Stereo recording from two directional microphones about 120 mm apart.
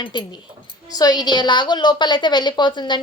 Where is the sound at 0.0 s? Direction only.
40° left (ahead or behind).